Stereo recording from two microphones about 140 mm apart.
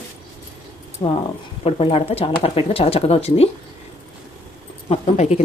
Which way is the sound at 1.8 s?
45° left (ahead or behind).